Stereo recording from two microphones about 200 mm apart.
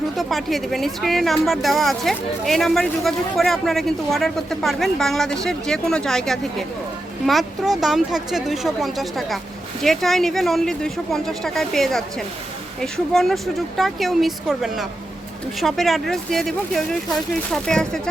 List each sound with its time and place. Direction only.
0.2 s speech: centre (ahead or behind)